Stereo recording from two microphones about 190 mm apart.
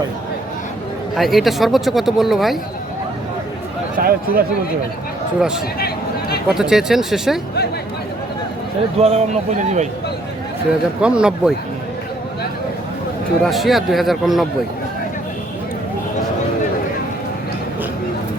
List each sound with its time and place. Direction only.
1.1 s speech: centre (ahead or behind)
3.9 s speech: 50° right (ahead or behind)
5.8 s a sound: 55° left (ahead or behind)
6.5 s speech: 5° right (ahead or behind)
9.0 s a man's voice: 35° right (ahead or behind)
11.0 s speech: 5° right (ahead or behind)
13.4 s speech: centre (ahead or behind)